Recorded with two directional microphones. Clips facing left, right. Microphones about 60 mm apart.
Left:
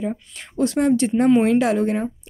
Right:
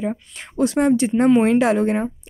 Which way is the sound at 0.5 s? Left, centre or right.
Centre.